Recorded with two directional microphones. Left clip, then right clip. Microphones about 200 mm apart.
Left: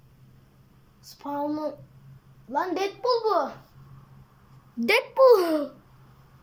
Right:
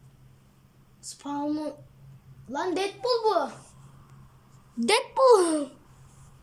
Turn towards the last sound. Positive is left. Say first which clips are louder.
# left 2 dB
turn(degrees=-15)  # may be behind; listen again after turning